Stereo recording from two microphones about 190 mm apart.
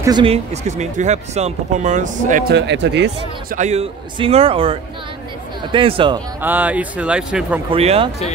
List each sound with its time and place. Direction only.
0.0 s speech: 25° right (ahead or behind); by 2.4 s 40° right (ahead or behind)
2.5 s speech: 65° right (ahead or behind)
3.5 s speech: 35° right (ahead or behind)
6.4 s a man's voice: 10° right (ahead or behind)
7.7 s speech: 30° right (ahead or behind)